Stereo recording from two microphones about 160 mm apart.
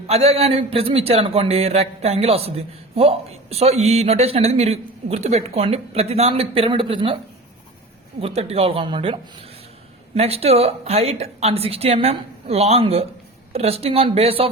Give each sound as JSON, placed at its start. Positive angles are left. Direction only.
{"t": 0.1, "sound": "a man's voice", "side_deg": -40}
{"t": 8.2, "sound": "a man's voice", "side_deg": -40}
{"t": 10.2, "sound": "a man's voice", "side_deg": -40}